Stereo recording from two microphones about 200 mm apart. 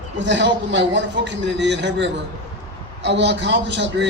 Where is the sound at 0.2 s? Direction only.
60° right (ahead or behind).